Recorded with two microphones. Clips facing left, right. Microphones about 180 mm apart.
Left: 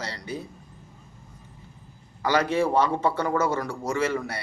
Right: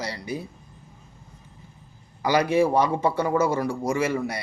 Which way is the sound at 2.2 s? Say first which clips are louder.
Right 3 dB; 10° right (ahead or behind).